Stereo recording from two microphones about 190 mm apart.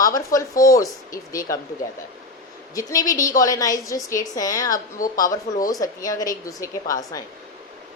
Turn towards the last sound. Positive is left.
turn(degrees=20)  # may be behind; listen again after turning